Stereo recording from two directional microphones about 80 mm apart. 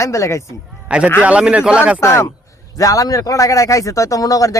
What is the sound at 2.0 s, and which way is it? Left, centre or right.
Speech, left.